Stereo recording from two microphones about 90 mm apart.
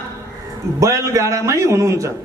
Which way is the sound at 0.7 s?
35° right (ahead or behind).